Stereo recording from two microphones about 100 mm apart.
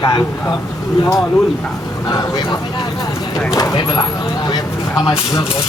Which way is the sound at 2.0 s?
45° left (ahead or behind).